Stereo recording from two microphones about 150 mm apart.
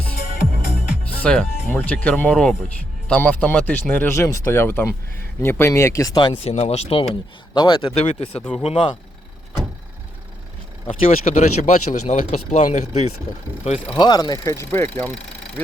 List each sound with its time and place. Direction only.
1.2 s speech: 5° left (ahead or behind); by 6.5 s 30° left (ahead or behind)
6.5 s speech: 45° left (ahead or behind)
8.4 s speech: 5° left (ahead or behind)
8.6 s speech: 35° left (ahead or behind)
10.8 s speech: 45° left (ahead or behind)
14.0 s speech: 25° left (ahead or behind)